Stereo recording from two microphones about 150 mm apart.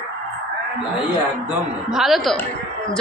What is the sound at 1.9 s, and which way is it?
Speech, centre (ahead or behind).